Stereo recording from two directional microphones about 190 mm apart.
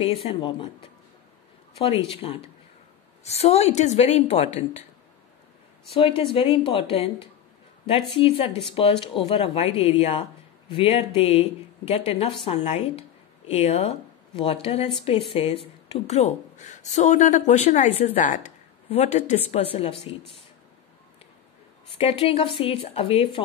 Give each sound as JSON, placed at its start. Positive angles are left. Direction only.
{"t": 0.0, "sound": "speech", "side_deg": 25}
{"t": 1.8, "sound": "speech", "side_deg": 30}
{"t": 5.9, "sound": "speech", "side_deg": 30}
{"t": 21.9, "sound": "speech", "side_deg": 30}